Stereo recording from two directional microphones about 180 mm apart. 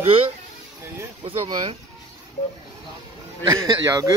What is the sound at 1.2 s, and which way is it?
Speech, 30° right (ahead or behind).